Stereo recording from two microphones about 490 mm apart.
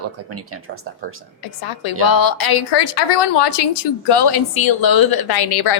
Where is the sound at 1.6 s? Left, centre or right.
Left.